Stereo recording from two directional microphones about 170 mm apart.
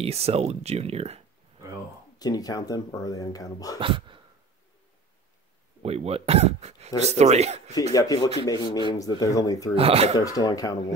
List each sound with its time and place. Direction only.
0.0 s speech: 35° right (ahead or behind)
2.1 s speech: 20° left (ahead or behind)
3.8 s speech: 30° right (ahead or behind)
5.8 s speech: 35° right (ahead or behind)
7.9 s speech: 20° left (ahead or behind)
9.8 s speech: 35° right (ahead or behind)
10.1 s speech: 20° left (ahead or behind)